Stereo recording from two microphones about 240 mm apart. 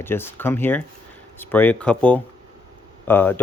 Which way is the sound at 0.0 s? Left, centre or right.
Centre.